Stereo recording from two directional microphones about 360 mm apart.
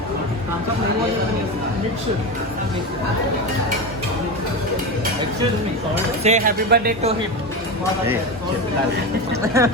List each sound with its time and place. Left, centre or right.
6.2 s speech: right
9.6 s speech: centre